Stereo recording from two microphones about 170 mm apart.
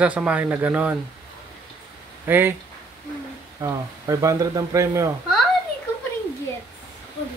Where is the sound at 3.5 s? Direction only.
20° right (ahead or behind).